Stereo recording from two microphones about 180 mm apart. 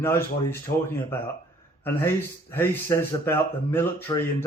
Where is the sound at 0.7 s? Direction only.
50° left (ahead or behind).